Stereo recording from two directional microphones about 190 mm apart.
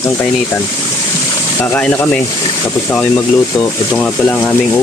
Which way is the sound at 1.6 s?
10° left (ahead or behind).